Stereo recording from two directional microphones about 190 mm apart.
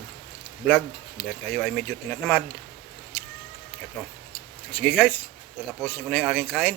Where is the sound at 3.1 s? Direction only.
15° left (ahead or behind).